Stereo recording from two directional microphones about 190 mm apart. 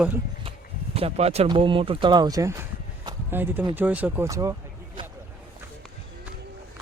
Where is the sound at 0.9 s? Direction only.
30° right (ahead or behind); by 4.5 s 15° right (ahead or behind).